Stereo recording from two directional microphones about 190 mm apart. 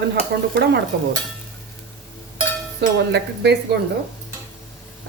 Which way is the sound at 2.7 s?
60° right (ahead or behind).